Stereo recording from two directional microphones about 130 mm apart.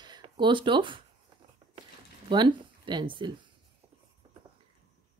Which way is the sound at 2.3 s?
35° right (ahead or behind).